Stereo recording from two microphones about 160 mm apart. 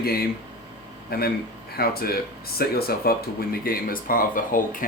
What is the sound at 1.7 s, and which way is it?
Speech, 70° left (ahead or behind).